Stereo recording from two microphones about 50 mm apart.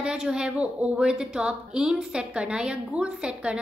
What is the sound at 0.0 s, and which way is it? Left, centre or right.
A woman's voice, centre.